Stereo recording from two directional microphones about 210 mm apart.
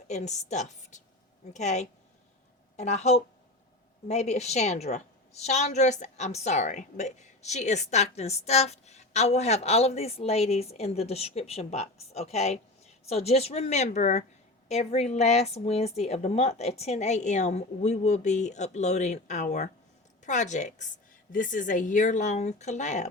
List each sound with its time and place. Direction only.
0.1 s a woman's voice: 35° left (ahead or behind)